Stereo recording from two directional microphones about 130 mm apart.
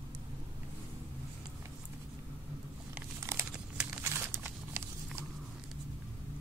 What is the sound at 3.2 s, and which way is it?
Crumpling, 20° right (ahead or behind).